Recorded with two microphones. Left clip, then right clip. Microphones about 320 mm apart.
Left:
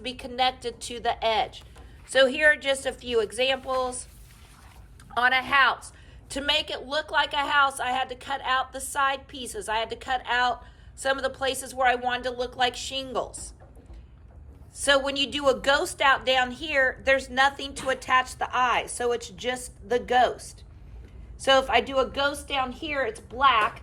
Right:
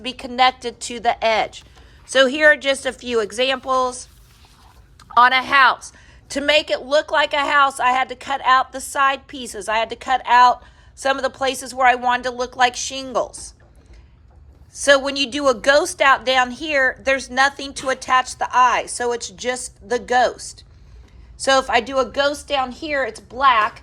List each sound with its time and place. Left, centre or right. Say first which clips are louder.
0.0 s a woman's voice: right 9 dB; right
5.1 s a woman's voice: right 8 dB; centre
14.8 s a woman's voice: right 7 dB; centre